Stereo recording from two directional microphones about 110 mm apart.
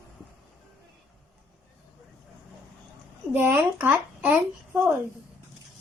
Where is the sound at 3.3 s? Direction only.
15° right (ahead or behind).